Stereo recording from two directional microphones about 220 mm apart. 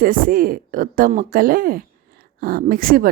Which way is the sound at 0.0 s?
40° right (ahead or behind).